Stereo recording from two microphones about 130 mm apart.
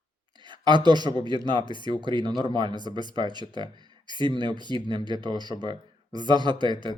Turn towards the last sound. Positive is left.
turn(degrees=-35)  # may be behind; listen again after turning